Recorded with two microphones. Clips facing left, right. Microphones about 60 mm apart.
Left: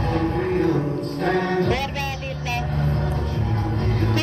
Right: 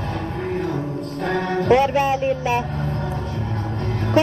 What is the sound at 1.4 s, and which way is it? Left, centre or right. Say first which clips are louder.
Vehicle: right 10 dB; centre.